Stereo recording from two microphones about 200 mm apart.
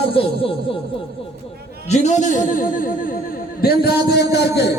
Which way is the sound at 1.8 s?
35° left (ahead or behind).